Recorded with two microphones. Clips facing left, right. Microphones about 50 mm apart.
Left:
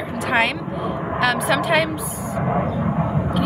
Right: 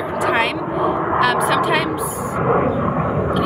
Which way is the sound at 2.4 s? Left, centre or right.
Right.